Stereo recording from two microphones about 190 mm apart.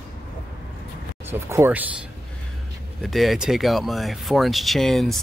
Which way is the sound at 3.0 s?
Centre (ahead or behind).